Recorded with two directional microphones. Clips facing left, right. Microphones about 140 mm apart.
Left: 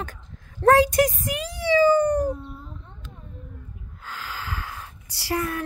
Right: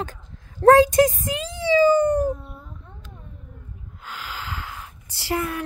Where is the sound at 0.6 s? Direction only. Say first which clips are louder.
Right 4 dB; 25° right (ahead or behind).